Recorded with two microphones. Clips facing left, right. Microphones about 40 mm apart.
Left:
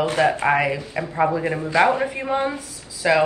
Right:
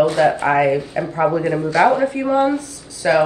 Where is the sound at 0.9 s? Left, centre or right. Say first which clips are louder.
Right 5 dB; centre.